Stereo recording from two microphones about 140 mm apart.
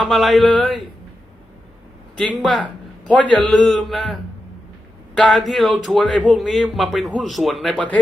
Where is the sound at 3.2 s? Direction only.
10° left (ahead or behind).